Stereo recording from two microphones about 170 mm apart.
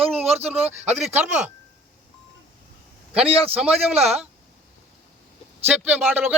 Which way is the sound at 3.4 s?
35° right (ahead or behind).